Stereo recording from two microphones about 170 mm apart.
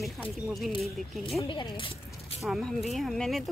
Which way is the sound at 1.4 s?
25° left (ahead or behind).